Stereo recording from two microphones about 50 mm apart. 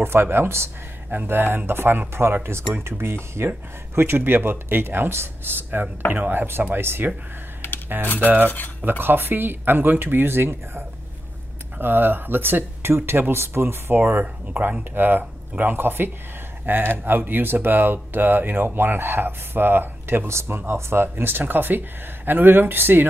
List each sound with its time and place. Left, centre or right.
0.0 s speech: right
6.1 s cutlery: right
6.6 s speech: right
8.2 s cutlery: right
8.5 s speech: left
9.0 s speech: right
20.2 s speech: right